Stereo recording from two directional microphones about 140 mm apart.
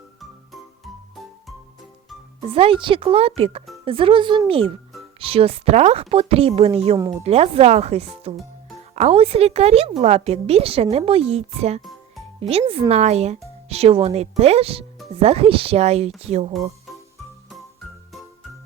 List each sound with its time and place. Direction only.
2.5 s speech: 40° right (ahead or behind)
11.8 s music: centre (ahead or behind)
12.4 s speech: 45° right (ahead or behind)